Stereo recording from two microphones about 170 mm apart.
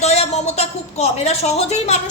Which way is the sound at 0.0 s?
40° left (ahead or behind).